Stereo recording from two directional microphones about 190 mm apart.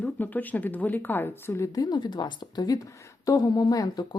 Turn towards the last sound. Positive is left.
turn(degrees=20)  # may be behind; listen again after turning